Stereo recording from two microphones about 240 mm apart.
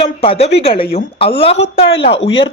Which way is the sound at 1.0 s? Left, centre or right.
Left.